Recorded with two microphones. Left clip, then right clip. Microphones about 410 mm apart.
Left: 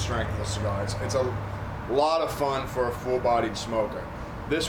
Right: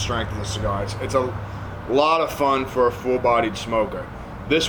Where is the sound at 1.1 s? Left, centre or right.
Right.